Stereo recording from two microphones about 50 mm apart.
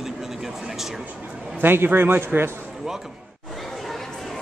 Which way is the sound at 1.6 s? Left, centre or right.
Right.